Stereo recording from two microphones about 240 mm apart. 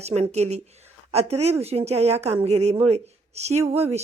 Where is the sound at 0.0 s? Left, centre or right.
Right.